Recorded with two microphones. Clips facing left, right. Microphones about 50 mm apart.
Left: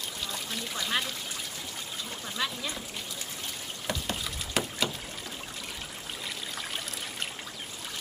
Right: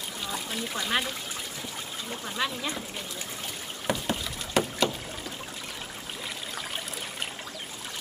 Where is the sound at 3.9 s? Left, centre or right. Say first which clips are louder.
Right 5 dB; centre.